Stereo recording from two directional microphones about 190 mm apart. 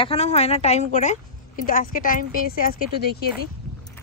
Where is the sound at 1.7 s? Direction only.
45° left (ahead or behind).